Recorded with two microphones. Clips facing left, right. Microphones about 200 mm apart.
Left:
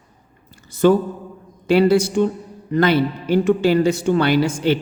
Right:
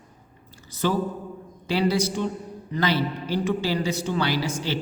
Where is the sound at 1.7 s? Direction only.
55° left (ahead or behind).